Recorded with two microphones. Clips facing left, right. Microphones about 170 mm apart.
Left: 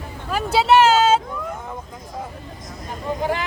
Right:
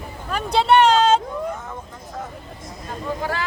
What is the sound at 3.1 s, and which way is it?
Vehicle, 20° left (ahead or behind).